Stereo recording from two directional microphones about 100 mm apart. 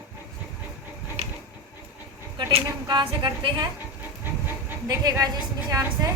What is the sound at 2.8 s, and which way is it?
Speech, 50° right (ahead or behind).